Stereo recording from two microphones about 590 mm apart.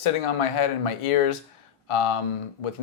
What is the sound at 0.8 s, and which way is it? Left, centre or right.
Speech, left.